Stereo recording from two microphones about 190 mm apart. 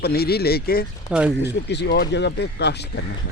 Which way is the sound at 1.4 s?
60° left (ahead or behind).